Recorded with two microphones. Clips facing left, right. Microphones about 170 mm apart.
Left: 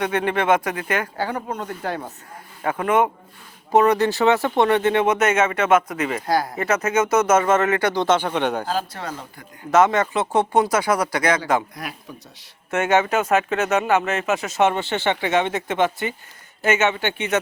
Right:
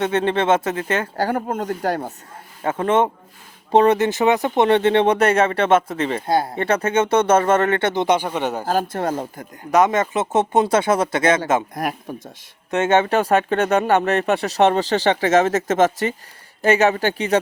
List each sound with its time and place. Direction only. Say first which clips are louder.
0.0 s speech: right 2 dB; 25° right (ahead or behind)
1.1 s speech: right 4 dB; 45° right (ahead or behind)
2.6 s speech: right 1 dB; 25° right (ahead or behind); by 8.6 s 5° right (ahead or behind)
8.6 s speech: right 5 dB; 50° right (ahead or behind)
9.7 s speech: even; 20° right (ahead or behind)
11.7 s speech: right 9 dB; 50° right (ahead or behind)
12.7 s speech: right 2 dB; 25° right (ahead or behind)